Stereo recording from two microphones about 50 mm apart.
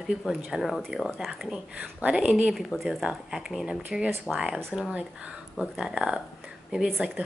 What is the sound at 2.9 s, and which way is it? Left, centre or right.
Speech, centre.